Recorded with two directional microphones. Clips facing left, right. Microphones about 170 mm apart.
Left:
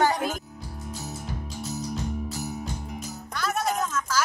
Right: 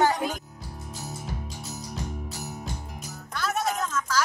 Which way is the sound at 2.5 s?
Centre (ahead or behind).